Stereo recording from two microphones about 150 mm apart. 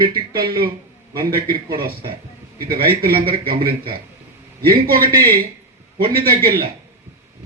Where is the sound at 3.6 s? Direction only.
35° right (ahead or behind).